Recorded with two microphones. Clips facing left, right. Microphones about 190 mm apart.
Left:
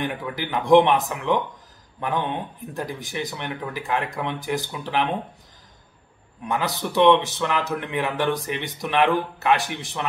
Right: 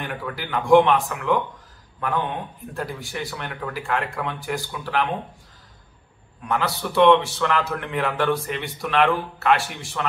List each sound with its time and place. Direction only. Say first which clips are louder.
0.0 s a man's voice: left 3 dB; 20° left (ahead or behind)
2.6 s speech: even; 20° left (ahead or behind)
6.4 s a man's voice: right 1 dB; 20° left (ahead or behind)